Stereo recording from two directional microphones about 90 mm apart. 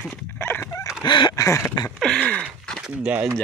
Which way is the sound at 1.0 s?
60° left (ahead or behind).